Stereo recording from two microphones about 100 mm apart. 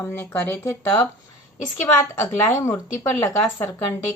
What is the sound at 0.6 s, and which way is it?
Speech, 30° left (ahead or behind).